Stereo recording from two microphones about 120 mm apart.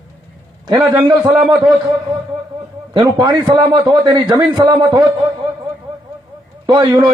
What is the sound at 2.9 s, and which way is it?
A man's voice, 40° right (ahead or behind).